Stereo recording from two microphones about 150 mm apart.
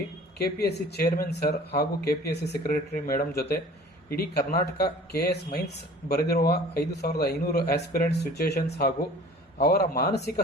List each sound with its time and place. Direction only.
0.3 s a man's voice: 90° left